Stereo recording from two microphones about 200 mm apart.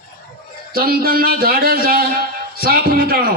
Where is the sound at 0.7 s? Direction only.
45° right (ahead or behind).